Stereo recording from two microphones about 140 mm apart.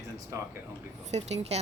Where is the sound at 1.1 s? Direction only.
50° right (ahead or behind).